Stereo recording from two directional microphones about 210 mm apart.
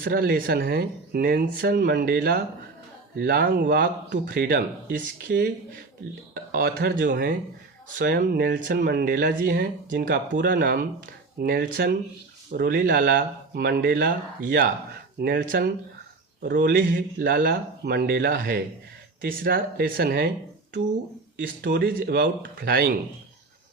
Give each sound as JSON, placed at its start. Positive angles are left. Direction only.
{"t": 0.0, "sound": "speech", "side_deg": -45}
{"t": 21.3, "sound": "speech", "side_deg": -55}